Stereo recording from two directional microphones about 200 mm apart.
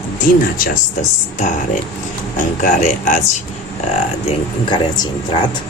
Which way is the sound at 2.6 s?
40° left (ahead or behind).